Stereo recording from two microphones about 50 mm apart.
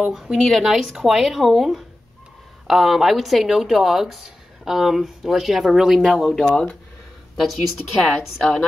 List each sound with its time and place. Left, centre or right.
0.0 s speech: centre
0.7 s speech: centre
5.9 s speech: centre
7.3 s speech: centre